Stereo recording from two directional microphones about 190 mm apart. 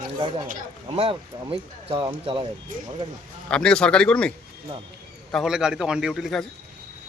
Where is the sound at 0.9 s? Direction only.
30° right (ahead or behind).